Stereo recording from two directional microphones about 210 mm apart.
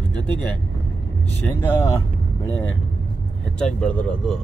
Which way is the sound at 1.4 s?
10° left (ahead or behind).